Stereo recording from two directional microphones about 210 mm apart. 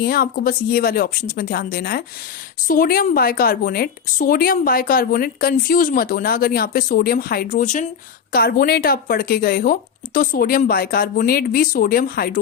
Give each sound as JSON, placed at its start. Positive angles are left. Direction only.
{"t": 0.0, "sound": "speech", "side_deg": 45}